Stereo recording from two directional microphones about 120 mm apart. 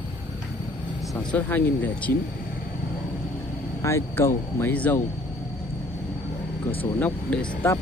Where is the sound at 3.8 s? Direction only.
25° left (ahead or behind).